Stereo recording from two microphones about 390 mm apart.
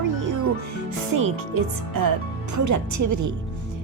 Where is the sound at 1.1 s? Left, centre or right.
Right.